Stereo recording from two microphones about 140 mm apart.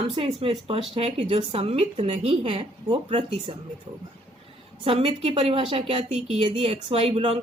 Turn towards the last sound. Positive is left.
turn(degrees=-45)  # may be behind; listen again after turning